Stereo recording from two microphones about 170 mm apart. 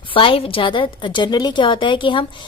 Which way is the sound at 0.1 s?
30° left (ahead or behind).